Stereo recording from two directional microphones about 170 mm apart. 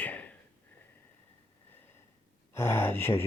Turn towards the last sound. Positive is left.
turn(degrees=15)  # may be behind; listen again after turning